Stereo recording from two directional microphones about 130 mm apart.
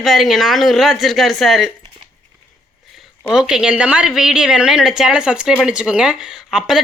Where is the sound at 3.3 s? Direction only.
5° right (ahead or behind).